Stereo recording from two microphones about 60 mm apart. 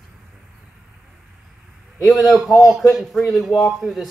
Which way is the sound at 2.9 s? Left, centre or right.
Centre.